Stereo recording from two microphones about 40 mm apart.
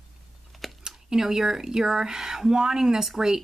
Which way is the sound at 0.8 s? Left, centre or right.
Centre.